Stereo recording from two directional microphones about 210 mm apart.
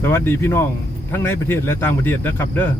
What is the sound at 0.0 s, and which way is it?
Speech, 10° left (ahead or behind).